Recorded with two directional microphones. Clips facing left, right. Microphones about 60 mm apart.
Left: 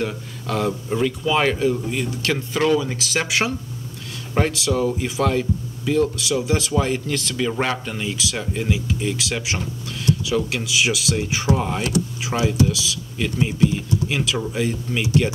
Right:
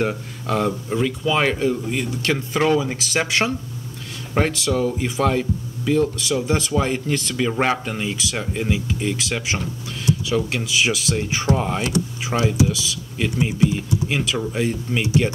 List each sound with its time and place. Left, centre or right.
0.5 s speech: centre
2.6 s speech: centre
3.0 s speech: centre
6.7 s speech: centre
13.2 s speech: centre